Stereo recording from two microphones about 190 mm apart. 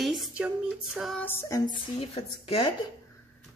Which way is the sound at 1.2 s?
10° left (ahead or behind).